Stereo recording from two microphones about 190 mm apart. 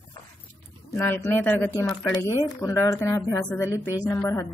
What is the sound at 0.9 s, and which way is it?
A woman's voice, 15° left (ahead or behind).